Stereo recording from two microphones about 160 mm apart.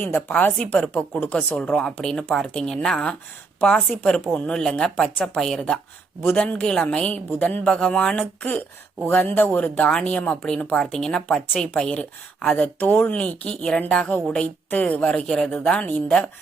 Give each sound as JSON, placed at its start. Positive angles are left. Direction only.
{"t": 0.0, "sound": "a woman's voice", "side_deg": 10}